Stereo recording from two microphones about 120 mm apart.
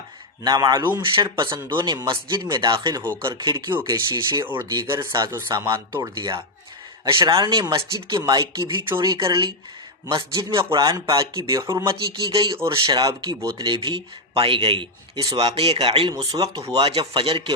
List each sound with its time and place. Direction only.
0.4 s speech: 35° right (ahead or behind)
3.7 s speech: 25° right (ahead or behind)
5.5 s speech: 40° right (ahead or behind)
5.9 s speech: 25° right (ahead or behind)
7.1 s speech: 45° right (ahead or behind)
11.1 s speech: 30° right (ahead or behind)
11.8 s speech: 45° right (ahead or behind)
15.4 s speech: 55° right (ahead or behind)
16.1 s speech: 30° right (ahead or behind)
16.8 s speech: 45° right (ahead or behind)